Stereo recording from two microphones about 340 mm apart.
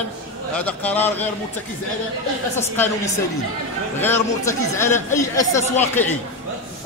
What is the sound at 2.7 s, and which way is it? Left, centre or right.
Speech, centre.